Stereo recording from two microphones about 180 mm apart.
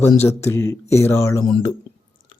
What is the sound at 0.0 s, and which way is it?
Speech, 15° left (ahead or behind).